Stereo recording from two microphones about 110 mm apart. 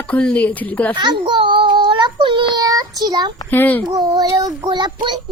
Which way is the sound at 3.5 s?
15° left (ahead or behind).